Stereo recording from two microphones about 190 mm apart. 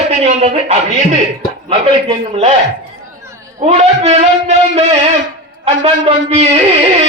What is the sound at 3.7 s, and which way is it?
A man's voice, 35° right (ahead or behind).